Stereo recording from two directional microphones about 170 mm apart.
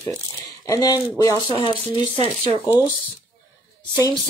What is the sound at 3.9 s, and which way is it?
Speech, 25° left (ahead or behind).